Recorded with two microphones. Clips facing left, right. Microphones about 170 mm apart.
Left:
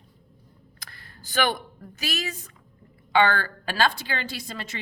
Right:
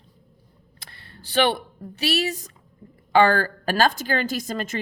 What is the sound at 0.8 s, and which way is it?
A woman's voice, 25° right (ahead or behind).